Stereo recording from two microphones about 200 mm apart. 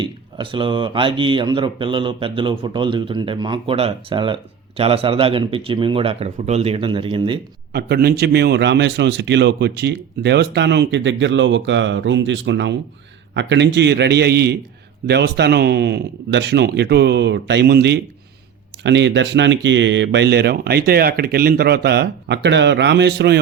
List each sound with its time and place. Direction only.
0.0 s speech: 25° right (ahead or behind)
7.7 s a man's voice: 55° right (ahead or behind)